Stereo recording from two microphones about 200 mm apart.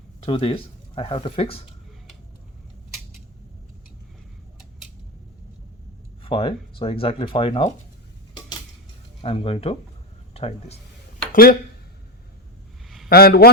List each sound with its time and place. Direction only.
0.2 s speech: 30° left (ahead or behind)
6.2 s speech: 25° left (ahead or behind)
9.2 s speech: 30° left (ahead or behind)
11.3 s speech: 45° left (ahead or behind)
13.1 s a man's voice: 50° left (ahead or behind)